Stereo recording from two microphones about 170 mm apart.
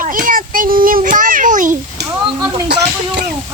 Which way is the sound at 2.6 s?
80° right.